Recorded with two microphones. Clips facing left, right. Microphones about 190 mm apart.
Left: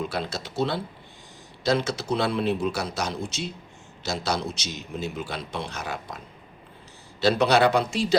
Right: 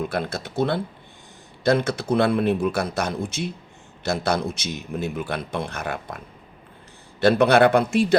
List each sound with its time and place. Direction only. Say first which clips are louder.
0.0 s a man's voice: right 3 dB; 55° right (ahead or behind)